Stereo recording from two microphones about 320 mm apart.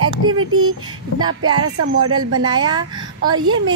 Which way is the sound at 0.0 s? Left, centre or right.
Right.